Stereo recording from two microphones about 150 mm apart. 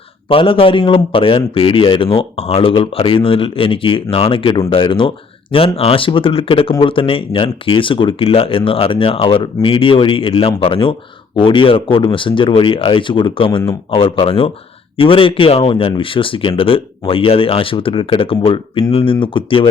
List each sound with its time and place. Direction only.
0.3 s speech: 35° left (ahead or behind)